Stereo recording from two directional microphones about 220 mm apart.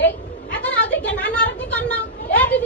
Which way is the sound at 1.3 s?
5° left (ahead or behind).